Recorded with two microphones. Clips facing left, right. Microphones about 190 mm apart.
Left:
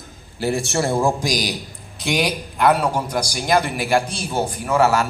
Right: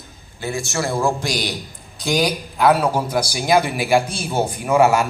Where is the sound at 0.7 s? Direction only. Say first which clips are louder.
Even; 25° left (ahead or behind).